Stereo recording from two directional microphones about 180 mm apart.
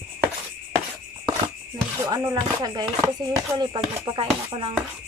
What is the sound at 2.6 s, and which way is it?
Music, 25° right (ahead or behind).